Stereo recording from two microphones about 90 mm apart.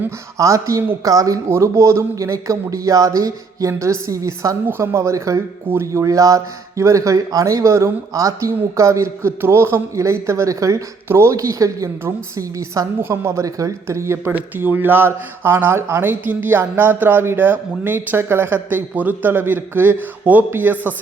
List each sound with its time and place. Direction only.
0.3 s speech: 35° right (ahead or behind)
14.3 s speech: 20° right (ahead or behind)